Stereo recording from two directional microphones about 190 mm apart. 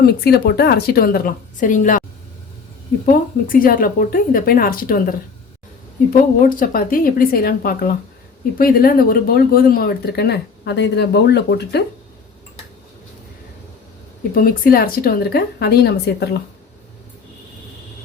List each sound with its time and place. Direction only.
0.0 s a woman's voice: 55° left (ahead or behind)
3.1 s a woman's voice: 45° left (ahead or behind)
6.6 s a woman's voice: 50° left (ahead or behind)
14.3 s speech: 50° left (ahead or behind)